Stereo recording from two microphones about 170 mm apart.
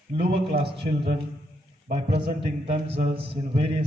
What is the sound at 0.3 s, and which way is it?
Speech, 35° right (ahead or behind).